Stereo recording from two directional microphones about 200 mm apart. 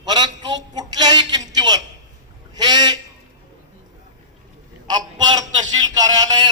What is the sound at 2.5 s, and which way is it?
Goose, 20° right (ahead or behind).